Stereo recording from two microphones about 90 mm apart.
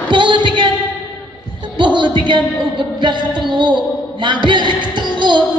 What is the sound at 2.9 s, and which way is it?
A man's voice, 60° right (ahead or behind).